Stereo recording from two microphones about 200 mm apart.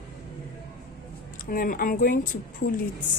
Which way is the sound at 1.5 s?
45° left (ahead or behind).